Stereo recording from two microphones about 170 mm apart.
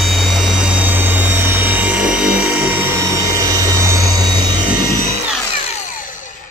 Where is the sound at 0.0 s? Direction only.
Centre (ahead or behind); by 4.6 s 20° right (ahead or behind).